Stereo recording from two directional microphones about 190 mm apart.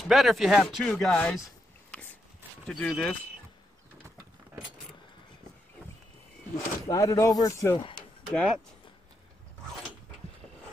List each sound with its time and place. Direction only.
0.0 s speech: centre (ahead or behind)
2.6 s speech: 5° left (ahead or behind)
6.9 s speech: 15° left (ahead or behind)
8.3 s speech: 5° left (ahead or behind)